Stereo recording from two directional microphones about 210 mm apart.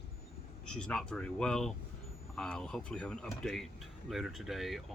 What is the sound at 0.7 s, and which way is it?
Speech, 5° left (ahead or behind).